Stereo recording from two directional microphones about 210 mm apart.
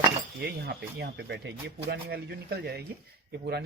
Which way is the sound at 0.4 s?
50° right (ahead or behind).